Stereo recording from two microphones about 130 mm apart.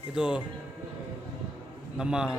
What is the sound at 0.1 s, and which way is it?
Speech, 5° right (ahead or behind).